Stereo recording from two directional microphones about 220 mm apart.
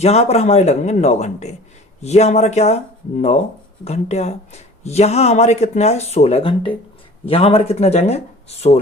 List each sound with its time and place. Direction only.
0.0 s speech: 30° left (ahead or behind)